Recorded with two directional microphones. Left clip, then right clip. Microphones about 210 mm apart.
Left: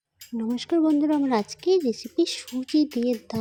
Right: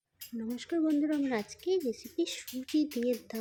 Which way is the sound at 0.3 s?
30° left (ahead or behind).